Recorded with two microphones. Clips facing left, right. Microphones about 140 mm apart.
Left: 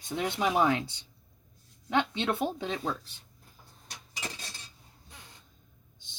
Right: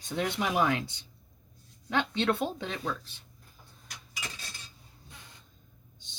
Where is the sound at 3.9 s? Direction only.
30° left (ahead or behind).